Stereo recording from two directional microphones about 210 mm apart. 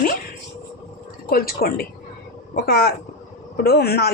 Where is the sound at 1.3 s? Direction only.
45° left (ahead or behind).